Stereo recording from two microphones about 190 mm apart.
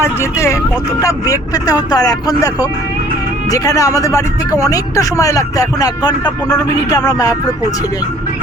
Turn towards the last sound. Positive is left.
turn(degrees=20)  # may be behind; listen again after turning